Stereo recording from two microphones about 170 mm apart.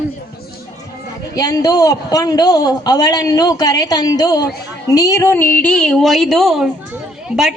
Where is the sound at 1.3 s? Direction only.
20° left (ahead or behind).